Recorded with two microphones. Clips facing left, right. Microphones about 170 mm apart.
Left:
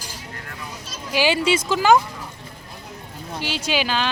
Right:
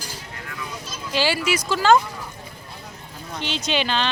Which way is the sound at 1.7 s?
15° left (ahead or behind).